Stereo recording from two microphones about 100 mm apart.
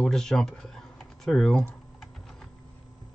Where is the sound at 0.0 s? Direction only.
5° left (ahead or behind).